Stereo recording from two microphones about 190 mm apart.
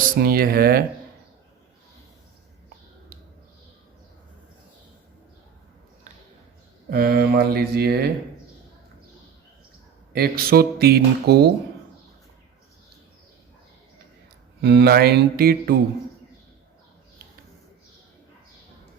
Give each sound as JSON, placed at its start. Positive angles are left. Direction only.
{"t": 0.1, "sound": "speech", "side_deg": -50}
{"t": 6.9, "sound": "speech", "side_deg": -55}
{"t": 10.1, "sound": "speech", "side_deg": -55}
{"t": 14.6, "sound": "speech", "side_deg": -60}